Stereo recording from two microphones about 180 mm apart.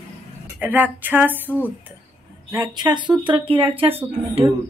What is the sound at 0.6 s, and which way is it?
Speech, 10° right (ahead or behind).